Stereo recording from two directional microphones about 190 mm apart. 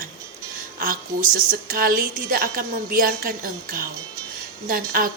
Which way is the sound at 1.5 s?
50° right (ahead or behind).